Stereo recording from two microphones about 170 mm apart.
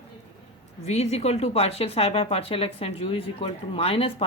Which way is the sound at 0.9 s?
40° left (ahead or behind).